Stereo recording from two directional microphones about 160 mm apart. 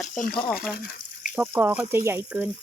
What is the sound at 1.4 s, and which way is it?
Speech, 10° right (ahead or behind).